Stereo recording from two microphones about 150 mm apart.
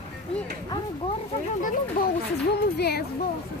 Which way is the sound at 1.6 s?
70° left (ahead or behind).